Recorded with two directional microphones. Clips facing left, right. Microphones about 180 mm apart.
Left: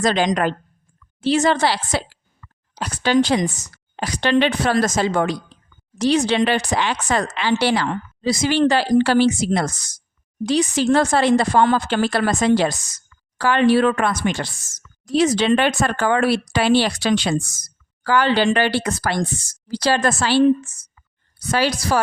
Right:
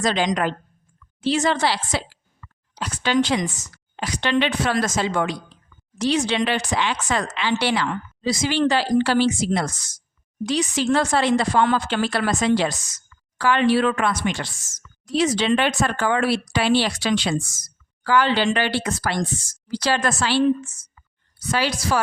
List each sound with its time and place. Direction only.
0.0 s a woman's voice: 45° left (ahead or behind)